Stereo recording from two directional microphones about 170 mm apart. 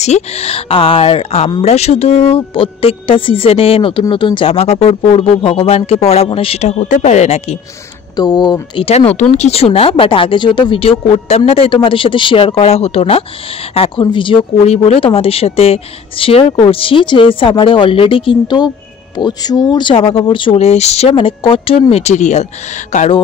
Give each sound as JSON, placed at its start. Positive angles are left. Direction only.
{"t": 0.0, "sound": "speech", "side_deg": 40}
{"t": 8.2, "sound": "speech", "side_deg": 25}